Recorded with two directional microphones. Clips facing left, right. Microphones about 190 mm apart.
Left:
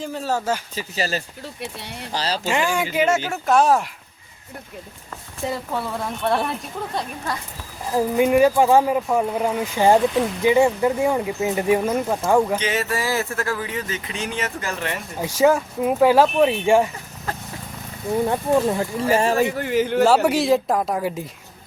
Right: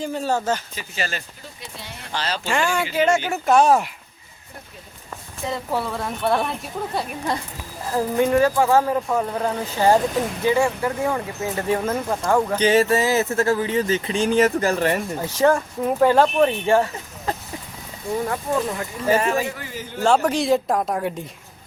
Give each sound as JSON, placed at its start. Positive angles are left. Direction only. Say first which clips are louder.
{"t": 0.0, "sound": "speech", "louder": "right 1 dB", "side_deg": 0}
{"t": 0.8, "sound": "speech", "louder": "left 4 dB", "side_deg": 35}
{"t": 2.5, "sound": "speech", "louder": "even", "side_deg": 15}
{"t": 3.2, "sound": "speech", "louder": "right 1 dB", "side_deg": 0}
{"t": 6.2, "sound": "speech", "louder": "right 1 dB", "side_deg": 0}
{"t": 7.9, "sound": "speech", "louder": "left 2 dB", "side_deg": 15}
{"t": 12.5, "sound": "speech", "louder": "right 7 dB", "side_deg": -30}
{"t": 15.2, "sound": "speech", "louder": "left 3 dB", "side_deg": 10}
{"t": 18.3, "sound": "speech", "louder": "left 4 dB", "side_deg": 25}
{"t": 19.4, "sound": "speech", "louder": "left 8 dB", "side_deg": 60}
{"t": 20.1, "sound": "speech", "louder": "right 4 dB", "side_deg": 5}